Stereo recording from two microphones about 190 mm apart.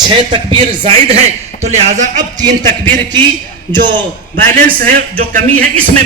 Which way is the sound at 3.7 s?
10° left (ahead or behind).